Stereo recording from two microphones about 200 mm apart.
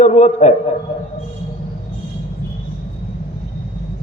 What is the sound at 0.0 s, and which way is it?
Speech, 35° left (ahead or behind).